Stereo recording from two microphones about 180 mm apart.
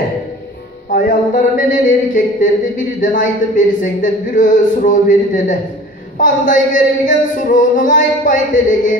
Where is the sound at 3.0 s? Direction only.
45° left (ahead or behind).